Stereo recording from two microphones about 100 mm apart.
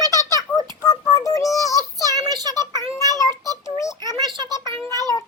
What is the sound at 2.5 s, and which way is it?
Child singing, 30° left (ahead or behind).